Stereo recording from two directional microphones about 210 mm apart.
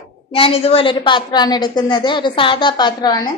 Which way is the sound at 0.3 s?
25° left (ahead or behind).